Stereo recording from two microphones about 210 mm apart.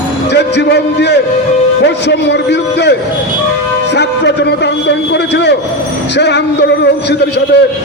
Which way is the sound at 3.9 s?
55° left (ahead or behind).